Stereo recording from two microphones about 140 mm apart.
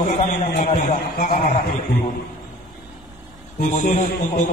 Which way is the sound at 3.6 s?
80° left.